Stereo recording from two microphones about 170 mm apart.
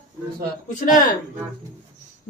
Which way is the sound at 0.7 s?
50° left (ahead or behind).